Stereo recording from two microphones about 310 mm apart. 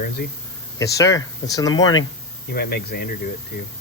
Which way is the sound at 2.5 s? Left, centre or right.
Left.